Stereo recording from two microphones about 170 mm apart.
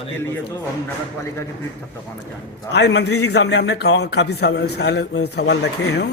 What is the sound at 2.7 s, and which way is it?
A man's voice, 90° left.